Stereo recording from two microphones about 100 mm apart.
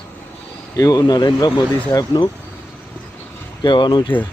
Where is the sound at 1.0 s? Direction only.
45° left (ahead or behind).